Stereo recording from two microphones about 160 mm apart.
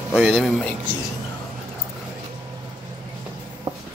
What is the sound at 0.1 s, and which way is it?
Speech, centre (ahead or behind).